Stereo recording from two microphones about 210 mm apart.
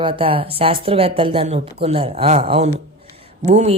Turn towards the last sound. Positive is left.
turn(degrees=-30)  # may be behind; listen again after turning